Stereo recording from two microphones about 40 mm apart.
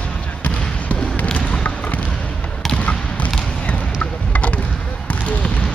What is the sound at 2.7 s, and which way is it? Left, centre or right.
Basketball bounce, left.